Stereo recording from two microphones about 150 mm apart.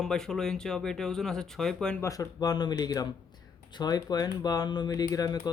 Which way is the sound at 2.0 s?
20° left (ahead or behind).